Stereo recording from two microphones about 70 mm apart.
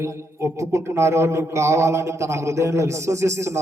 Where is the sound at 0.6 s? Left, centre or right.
Right.